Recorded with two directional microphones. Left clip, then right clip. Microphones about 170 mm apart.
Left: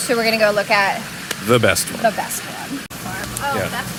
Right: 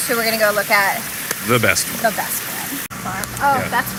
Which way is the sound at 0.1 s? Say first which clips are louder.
Left 1 dB; 25° left (ahead or behind).